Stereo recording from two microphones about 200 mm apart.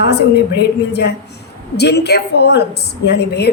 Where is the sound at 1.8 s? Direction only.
55° left (ahead or behind).